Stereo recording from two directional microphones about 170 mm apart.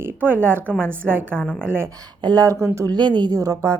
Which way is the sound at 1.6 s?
15° right (ahead or behind).